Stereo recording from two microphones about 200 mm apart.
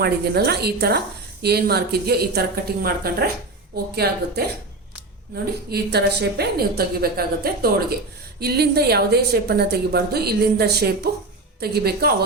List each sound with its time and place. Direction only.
0.0 s a woman's voice: 55° right (ahead or behind)
5.7 s a woman's voice: 55° right (ahead or behind)